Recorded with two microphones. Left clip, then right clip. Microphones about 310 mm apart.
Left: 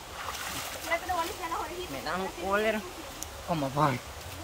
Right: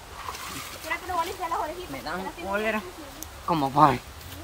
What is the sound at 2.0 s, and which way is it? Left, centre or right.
Speech, centre.